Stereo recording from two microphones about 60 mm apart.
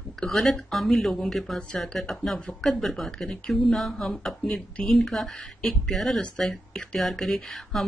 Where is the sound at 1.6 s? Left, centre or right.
Centre.